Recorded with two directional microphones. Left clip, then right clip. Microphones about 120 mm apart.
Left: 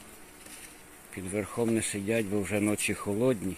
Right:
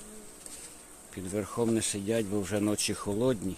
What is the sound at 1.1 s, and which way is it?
Speech, 5° right (ahead or behind).